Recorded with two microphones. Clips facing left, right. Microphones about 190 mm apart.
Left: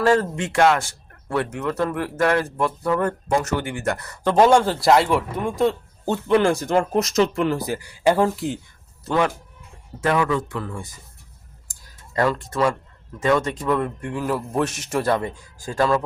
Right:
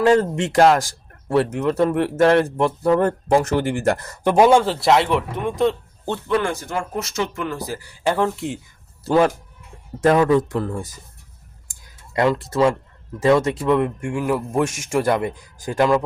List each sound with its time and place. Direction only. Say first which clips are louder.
0.0 s speech: right 3 dB; 20° right (ahead or behind)
4.2 s speech: right 1 dB; 10° right (ahead or behind); by 6.1 s 5° left (ahead or behind)
6.2 s speech: left 4 dB; 25° left (ahead or behind); by 8.6 s centre (ahead or behind)
10.0 s speech: right 6 dB; 35° right (ahead or behind)
12.1 s speech: right 3 dB; 20° right (ahead or behind)